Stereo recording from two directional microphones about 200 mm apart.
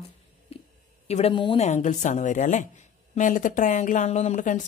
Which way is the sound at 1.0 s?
30° left (ahead or behind).